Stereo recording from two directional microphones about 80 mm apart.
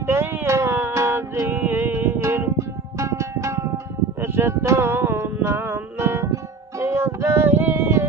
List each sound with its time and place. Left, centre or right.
0.0 s music: right
7.4 s music: right